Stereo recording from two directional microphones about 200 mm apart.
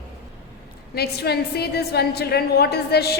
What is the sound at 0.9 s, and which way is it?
A woman's voice, 55° left (ahead or behind).